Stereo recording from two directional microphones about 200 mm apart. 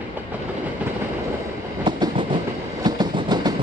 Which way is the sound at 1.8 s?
25° right (ahead or behind).